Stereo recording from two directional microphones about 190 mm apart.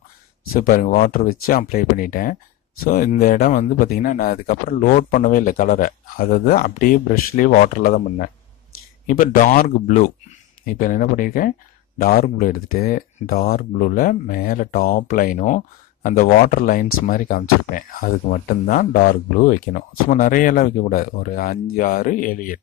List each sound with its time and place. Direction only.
0.5 s speech: 50° left (ahead or behind)
19.3 s speech: 45° left (ahead or behind)